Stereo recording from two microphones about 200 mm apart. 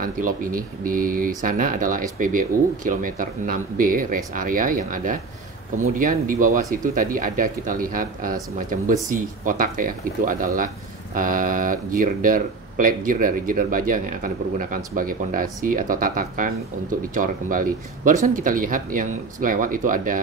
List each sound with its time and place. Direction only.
0.0 s speech: 45° right (ahead or behind)